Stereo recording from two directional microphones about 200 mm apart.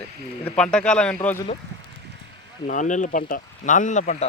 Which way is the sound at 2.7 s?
40° left (ahead or behind).